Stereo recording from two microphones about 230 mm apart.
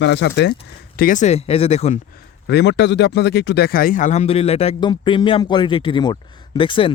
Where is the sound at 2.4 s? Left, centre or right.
Left.